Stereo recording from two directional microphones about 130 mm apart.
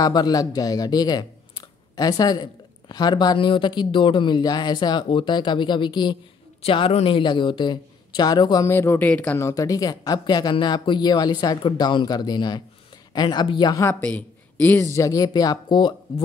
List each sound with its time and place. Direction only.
0.0 s speech: 30° left (ahead or behind)
8.6 s speech: 20° left (ahead or behind)
9.4 s speech: 25° left (ahead or behind)
13.8 s speech: 10° left (ahead or behind)
15.0 s speech: 25° left (ahead or behind)